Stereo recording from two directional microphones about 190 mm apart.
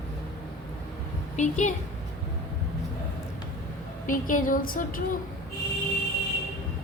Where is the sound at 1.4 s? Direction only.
40° left (ahead or behind).